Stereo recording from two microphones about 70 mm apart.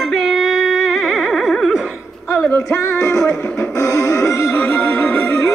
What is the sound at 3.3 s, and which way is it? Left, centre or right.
Music, centre.